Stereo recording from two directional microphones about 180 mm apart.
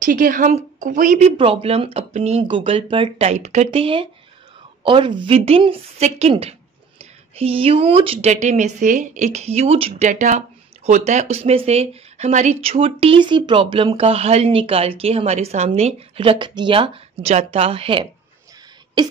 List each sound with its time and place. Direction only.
0.0 s a woman's voice: 50° right (ahead or behind)
1.4 s speech: 30° right (ahead or behind)